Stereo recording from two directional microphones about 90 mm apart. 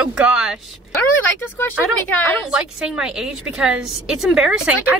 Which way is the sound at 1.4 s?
25° left (ahead or behind).